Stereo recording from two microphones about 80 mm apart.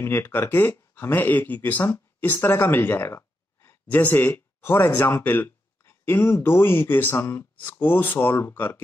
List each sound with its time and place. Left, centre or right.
0.0 s speech: left
3.8 s speech: left